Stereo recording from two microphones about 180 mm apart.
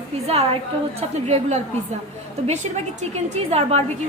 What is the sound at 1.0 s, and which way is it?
A woman's voice, 40° right (ahead or behind).